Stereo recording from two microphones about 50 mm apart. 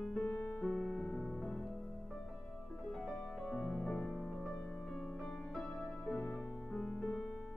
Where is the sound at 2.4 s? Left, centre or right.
Left.